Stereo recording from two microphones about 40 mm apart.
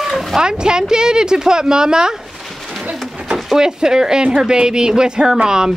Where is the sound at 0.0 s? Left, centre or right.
Centre.